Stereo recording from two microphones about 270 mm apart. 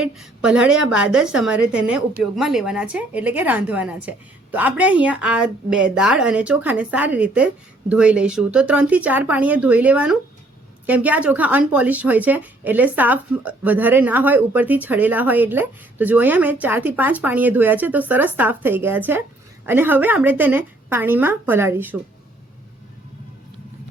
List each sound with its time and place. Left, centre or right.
0.0 s speech: centre